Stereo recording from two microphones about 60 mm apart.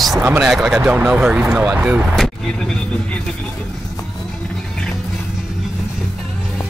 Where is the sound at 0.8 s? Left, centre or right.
Right.